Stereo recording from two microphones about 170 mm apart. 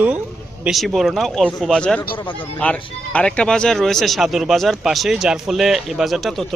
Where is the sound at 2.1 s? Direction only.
30° left (ahead or behind).